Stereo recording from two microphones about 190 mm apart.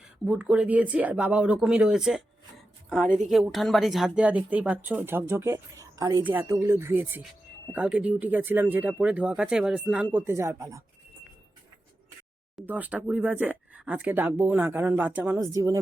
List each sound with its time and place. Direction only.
0.3 s speech: 5° right (ahead or behind)
12.5 s speech: 10° right (ahead or behind)